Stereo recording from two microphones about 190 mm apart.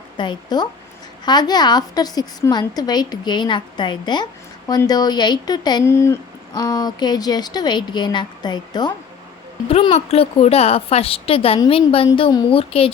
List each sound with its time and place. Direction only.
0.2 s a woman's voice: 25° left (ahead or behind)